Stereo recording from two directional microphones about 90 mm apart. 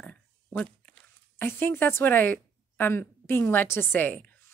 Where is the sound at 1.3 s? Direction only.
25° left (ahead or behind).